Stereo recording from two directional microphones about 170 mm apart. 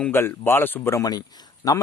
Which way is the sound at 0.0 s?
15° left (ahead or behind).